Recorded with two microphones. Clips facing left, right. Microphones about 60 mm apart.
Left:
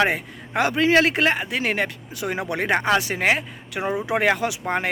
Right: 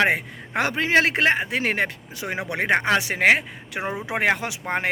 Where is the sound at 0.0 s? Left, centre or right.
Right.